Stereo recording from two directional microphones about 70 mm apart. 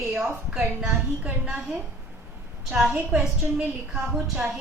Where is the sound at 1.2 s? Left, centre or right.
Centre.